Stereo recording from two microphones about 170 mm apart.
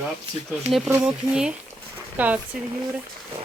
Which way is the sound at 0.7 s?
5° right (ahead or behind).